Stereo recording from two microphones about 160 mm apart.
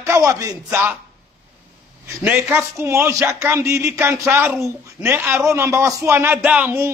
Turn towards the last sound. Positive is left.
turn(degrees=-15)  # may be behind; listen again after turning